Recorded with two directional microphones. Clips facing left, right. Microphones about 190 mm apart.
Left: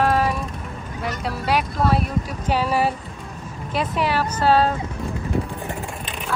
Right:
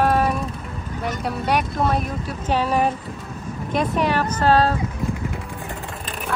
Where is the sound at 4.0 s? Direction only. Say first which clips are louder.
Left 2 dB; 10° left (ahead or behind).